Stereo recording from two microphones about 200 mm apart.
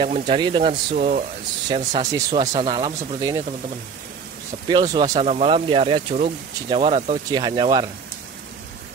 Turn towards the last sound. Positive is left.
turn(degrees=-20)  # may be behind; listen again after turning